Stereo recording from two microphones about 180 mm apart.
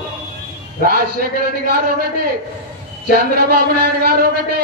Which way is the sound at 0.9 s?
55° right (ahead or behind).